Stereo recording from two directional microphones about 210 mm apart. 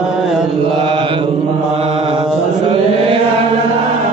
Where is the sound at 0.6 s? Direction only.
25° right (ahead or behind).